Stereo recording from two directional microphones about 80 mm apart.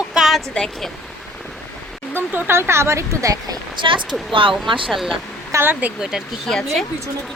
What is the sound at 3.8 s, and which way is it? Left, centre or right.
Speech, right.